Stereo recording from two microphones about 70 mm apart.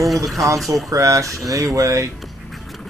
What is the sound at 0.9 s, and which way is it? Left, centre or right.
Speech, right.